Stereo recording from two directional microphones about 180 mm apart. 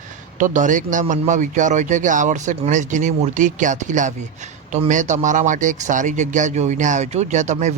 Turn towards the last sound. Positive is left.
turn(degrees=-40)  # may be behind; listen again after turning